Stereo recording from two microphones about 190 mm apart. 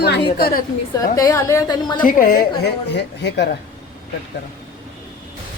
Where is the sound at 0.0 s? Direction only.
60° left (ahead or behind).